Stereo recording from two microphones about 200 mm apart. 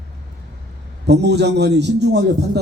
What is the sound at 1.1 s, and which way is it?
A man's voice, 55° right (ahead or behind).